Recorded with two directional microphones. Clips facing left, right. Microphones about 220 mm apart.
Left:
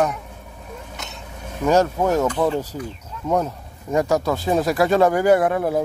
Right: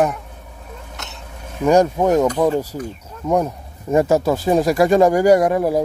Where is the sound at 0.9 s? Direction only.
Centre (ahead or behind).